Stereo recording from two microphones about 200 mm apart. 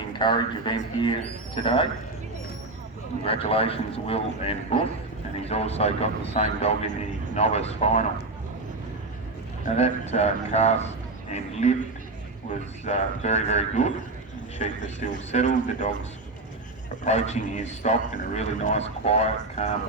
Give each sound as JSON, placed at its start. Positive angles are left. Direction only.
{"t": 0.2, "sound": "a man's voice", "side_deg": 25}
{"t": 3.2, "sound": "a man's voice", "side_deg": 30}
{"t": 9.6, "sound": "a man's voice", "side_deg": 35}
{"t": 17.0, "sound": "a man's voice", "side_deg": 35}